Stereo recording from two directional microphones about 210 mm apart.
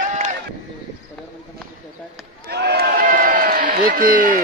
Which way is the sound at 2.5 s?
50° right (ahead or behind).